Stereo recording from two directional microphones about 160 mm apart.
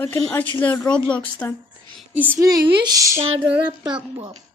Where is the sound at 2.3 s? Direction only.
20° right (ahead or behind).